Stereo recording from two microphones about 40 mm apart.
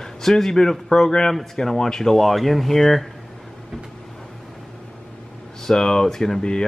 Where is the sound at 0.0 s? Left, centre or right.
Centre.